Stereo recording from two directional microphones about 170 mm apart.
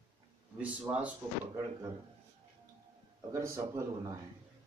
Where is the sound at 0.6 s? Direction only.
10° right (ahead or behind).